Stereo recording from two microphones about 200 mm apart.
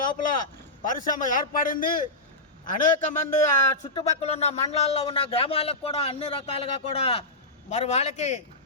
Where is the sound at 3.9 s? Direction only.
30° left (ahead or behind).